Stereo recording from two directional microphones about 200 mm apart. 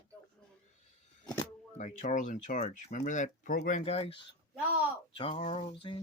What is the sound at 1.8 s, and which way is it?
Speech, 40° left (ahead or behind).